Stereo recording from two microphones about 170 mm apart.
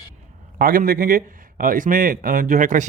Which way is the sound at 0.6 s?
60° right (ahead or behind).